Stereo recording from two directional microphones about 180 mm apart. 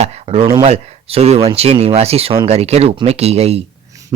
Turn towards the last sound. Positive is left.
turn(degrees=-35)  # may be behind; listen again after turning